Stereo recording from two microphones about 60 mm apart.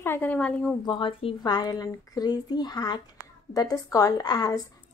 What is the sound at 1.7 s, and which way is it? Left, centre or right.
Speech, left.